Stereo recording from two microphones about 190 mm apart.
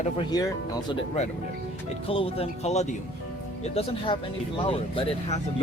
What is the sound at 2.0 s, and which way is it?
Speech, 30° left (ahead or behind).